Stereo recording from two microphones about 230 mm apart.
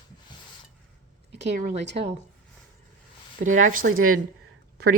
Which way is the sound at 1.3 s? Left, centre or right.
Right.